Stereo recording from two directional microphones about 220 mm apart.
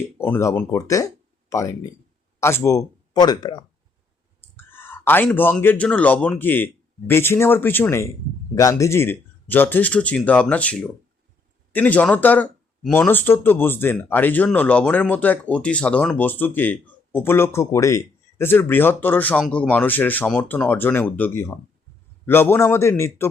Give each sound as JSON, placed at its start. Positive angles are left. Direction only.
{"t": 0.3, "sound": "speech", "side_deg": 10}